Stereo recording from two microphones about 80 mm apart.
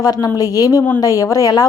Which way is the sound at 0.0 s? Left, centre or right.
Left.